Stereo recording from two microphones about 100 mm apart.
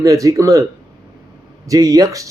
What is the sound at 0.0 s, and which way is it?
Speech, 35° right (ahead or behind).